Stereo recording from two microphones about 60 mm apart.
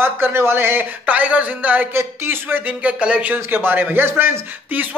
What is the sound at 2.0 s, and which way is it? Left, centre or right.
Speech, right.